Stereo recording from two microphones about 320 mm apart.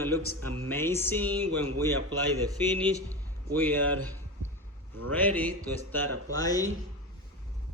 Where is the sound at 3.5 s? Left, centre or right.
Centre.